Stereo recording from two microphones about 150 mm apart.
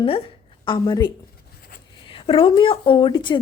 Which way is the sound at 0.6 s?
30° left (ahead or behind).